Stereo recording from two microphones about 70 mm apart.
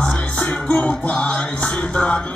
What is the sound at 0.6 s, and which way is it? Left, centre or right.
Music, centre.